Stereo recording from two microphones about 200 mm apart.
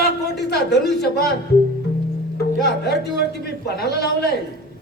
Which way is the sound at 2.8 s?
55° left (ahead or behind).